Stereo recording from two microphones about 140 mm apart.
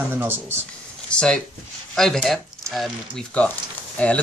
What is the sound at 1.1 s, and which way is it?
Speech, 5° left (ahead or behind).